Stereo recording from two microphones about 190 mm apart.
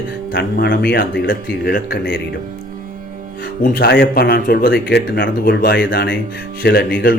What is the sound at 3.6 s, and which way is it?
Speech, 55° left (ahead or behind).